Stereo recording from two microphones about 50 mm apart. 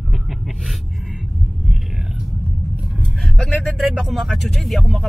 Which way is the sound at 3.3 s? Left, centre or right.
Centre.